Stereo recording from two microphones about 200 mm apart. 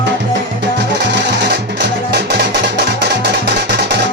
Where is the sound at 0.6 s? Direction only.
55° right (ahead or behind).